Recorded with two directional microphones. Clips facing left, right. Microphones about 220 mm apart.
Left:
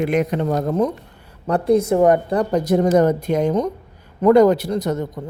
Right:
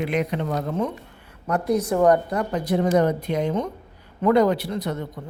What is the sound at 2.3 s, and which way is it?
Speech, 40° left (ahead or behind).